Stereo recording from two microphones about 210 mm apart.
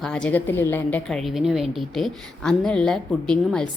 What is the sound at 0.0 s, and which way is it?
A woman's voice, 5° left (ahead or behind).